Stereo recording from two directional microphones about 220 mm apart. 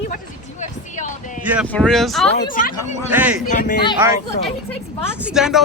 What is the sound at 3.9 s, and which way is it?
Speech, 15° right (ahead or behind).